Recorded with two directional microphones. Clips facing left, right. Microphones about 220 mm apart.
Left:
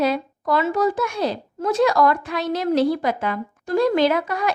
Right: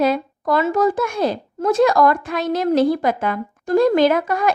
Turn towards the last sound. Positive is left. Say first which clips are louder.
# right 3 dB
turn(degrees=-50)  # may be behind; listen again after turning